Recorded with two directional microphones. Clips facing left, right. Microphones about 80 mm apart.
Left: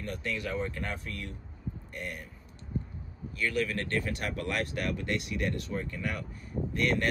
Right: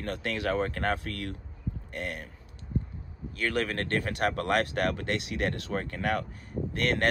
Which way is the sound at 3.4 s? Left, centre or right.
Right.